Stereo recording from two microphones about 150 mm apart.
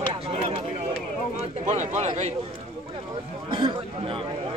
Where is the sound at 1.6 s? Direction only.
50° right (ahead or behind).